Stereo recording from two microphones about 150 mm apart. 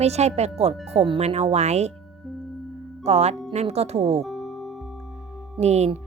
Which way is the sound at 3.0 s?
45° right (ahead or behind).